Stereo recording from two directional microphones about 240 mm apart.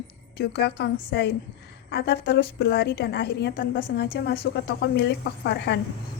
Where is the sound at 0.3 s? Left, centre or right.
Left.